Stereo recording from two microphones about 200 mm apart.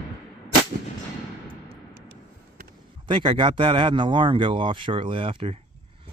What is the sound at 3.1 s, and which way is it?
Speech, 25° right (ahead or behind).